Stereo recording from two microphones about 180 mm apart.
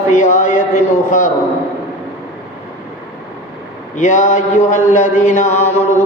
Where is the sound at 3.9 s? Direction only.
40° left (ahead or behind).